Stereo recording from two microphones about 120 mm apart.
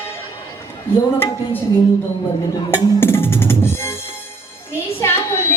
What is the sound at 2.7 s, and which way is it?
Drum, 20° left (ahead or behind).